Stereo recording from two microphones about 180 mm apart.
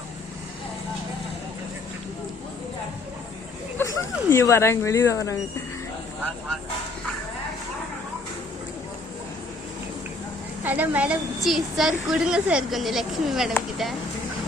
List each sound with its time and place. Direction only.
3.8 s speech: 15° left (ahead or behind)
10.6 s a woman's voice: 10° right (ahead or behind)